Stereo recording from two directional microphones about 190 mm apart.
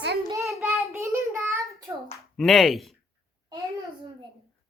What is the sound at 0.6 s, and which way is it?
Child singing, centre (ahead or behind).